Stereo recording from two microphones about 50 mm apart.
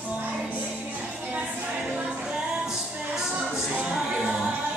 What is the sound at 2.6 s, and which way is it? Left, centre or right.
Music, centre.